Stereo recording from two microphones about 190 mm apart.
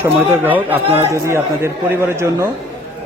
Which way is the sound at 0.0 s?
10° right (ahead or behind).